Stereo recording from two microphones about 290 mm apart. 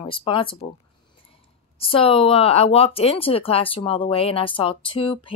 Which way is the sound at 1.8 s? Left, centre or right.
Centre.